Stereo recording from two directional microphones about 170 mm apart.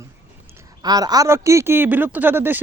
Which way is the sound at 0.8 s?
25° right (ahead or behind).